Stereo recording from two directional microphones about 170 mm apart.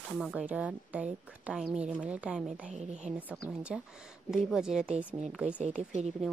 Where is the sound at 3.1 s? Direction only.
10° right (ahead or behind).